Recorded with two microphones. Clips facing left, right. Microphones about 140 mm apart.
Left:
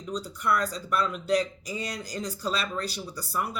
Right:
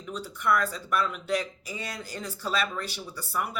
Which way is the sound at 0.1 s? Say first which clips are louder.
Right 1 dB; 35° left (ahead or behind).